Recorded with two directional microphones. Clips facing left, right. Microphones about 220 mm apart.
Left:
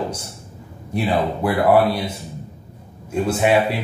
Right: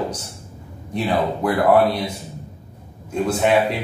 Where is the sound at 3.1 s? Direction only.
5° left (ahead or behind).